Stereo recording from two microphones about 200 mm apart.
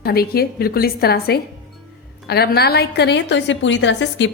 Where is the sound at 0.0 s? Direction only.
50° left (ahead or behind).